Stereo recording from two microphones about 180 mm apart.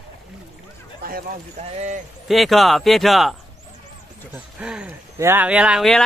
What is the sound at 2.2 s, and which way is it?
Speech, centre (ahead or behind).